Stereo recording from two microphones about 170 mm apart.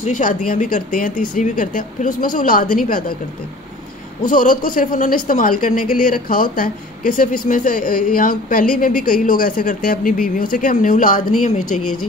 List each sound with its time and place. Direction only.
0.0 s a woman's voice: 50° left (ahead or behind)
4.3 s a woman's voice: 50° left (ahead or behind)